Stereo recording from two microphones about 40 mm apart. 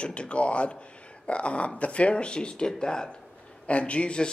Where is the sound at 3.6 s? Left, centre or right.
Left.